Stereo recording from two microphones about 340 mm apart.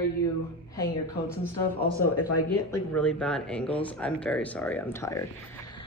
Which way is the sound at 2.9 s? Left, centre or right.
Centre.